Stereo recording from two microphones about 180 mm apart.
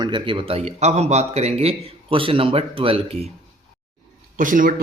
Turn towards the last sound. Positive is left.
turn(degrees=-50)  # may be behind; listen again after turning